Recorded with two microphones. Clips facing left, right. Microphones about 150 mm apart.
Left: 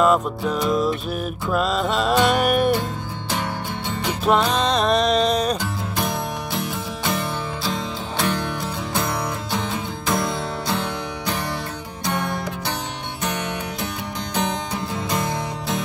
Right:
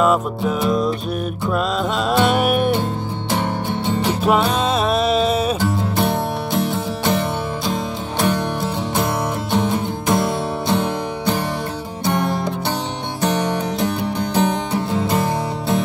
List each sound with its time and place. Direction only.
0.0 s music: 5° right (ahead or behind)
4.3 s music: 5° right (ahead or behind)
8.2 s music: 20° right (ahead or behind)
13.2 s music: 35° right (ahead or behind)